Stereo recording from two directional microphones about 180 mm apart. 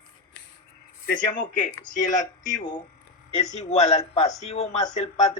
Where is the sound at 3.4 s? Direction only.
40° left (ahead or behind).